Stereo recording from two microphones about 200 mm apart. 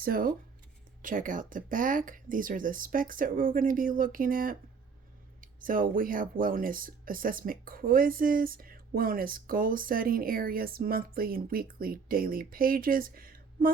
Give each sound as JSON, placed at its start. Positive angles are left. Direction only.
{"t": 0.0, "sound": "speech", "side_deg": -45}